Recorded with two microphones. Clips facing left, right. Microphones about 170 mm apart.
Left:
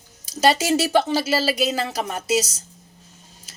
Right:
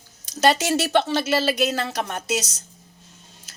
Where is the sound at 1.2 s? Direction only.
35° left (ahead or behind).